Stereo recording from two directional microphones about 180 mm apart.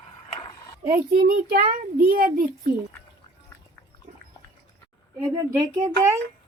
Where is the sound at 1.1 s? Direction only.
55° right (ahead or behind).